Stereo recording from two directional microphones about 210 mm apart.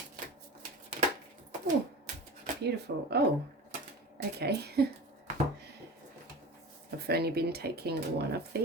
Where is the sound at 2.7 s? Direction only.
50° right (ahead or behind).